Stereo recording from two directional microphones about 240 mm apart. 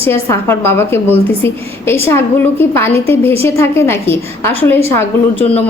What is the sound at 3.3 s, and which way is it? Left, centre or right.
Speech, right.